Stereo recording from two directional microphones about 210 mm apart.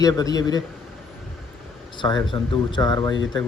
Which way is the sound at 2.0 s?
20° left (ahead or behind).